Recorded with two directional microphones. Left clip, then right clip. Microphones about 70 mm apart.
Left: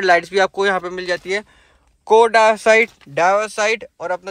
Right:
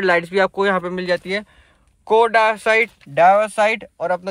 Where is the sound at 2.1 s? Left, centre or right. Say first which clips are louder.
Left 3 dB; left.